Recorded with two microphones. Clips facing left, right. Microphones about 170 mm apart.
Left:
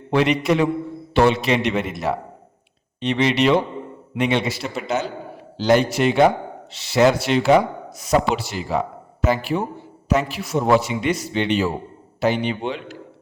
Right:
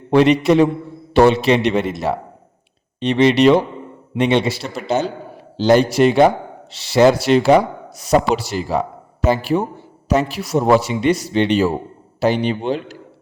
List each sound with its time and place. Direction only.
0.1 s a man's voice: 35° right (ahead or behind)